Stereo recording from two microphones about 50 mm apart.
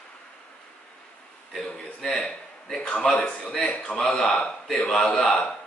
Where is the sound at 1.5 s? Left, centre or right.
Centre.